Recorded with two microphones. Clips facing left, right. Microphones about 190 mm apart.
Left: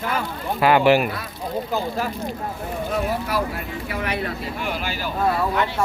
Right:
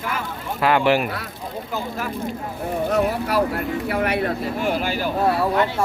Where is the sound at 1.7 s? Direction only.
30° left (ahead or behind).